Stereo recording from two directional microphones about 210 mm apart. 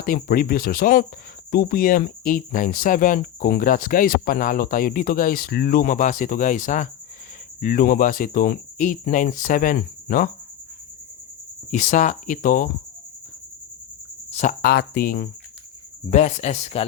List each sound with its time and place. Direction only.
0.0 s speech: 45° left (ahead or behind)
11.7 s speech: 40° left (ahead or behind)
14.3 s a sound: 30° left (ahead or behind)
14.6 s speech: 45° left (ahead or behind)
16.0 s speech: 35° left (ahead or behind)